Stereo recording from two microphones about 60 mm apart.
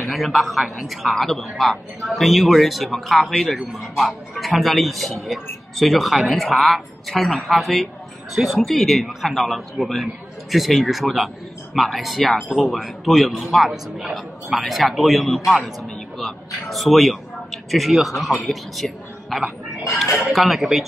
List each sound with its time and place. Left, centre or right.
0.0 s a man's voice: centre